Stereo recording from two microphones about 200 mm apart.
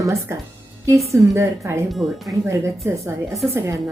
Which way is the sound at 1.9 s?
Centre (ahead or behind).